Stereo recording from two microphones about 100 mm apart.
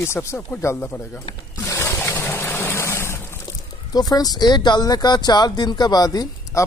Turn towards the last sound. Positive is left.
turn(degrees=40)  # may be behind; listen again after turning